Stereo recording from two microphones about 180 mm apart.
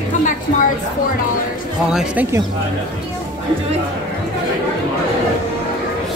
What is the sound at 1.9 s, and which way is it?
Speech, 5° right (ahead or behind).